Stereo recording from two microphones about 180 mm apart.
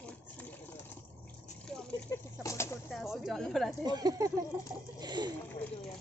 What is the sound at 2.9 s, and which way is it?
Speech, centre (ahead or behind).